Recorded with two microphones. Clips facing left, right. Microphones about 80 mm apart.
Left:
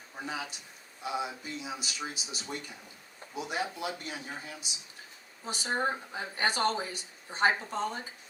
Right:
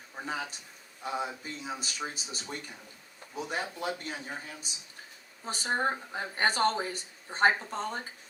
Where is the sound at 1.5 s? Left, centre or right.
Right.